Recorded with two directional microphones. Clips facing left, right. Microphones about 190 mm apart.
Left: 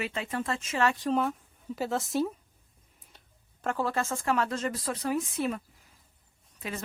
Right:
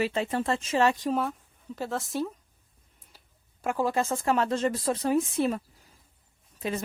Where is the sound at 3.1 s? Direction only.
5° right (ahead or behind).